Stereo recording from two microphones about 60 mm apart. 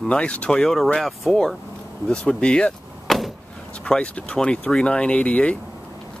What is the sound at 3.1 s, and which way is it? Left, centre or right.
Vehicle, centre.